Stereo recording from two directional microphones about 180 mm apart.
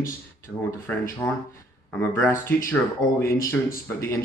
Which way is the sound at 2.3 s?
10° left (ahead or behind).